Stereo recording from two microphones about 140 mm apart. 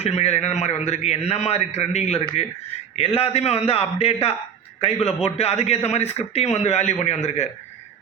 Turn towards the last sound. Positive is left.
turn(degrees=50)  # may be behind; listen again after turning